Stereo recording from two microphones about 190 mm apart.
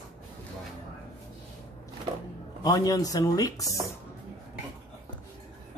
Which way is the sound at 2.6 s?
20° left (ahead or behind).